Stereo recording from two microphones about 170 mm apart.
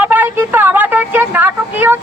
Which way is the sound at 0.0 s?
10° right (ahead or behind).